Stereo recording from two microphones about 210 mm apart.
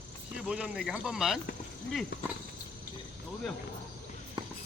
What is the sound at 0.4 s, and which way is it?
Speech, 5° right (ahead or behind).